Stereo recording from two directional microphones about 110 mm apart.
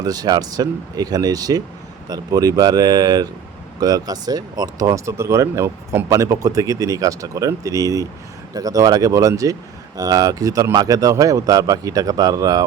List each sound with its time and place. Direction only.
0.0 s speech: 35° right (ahead or behind)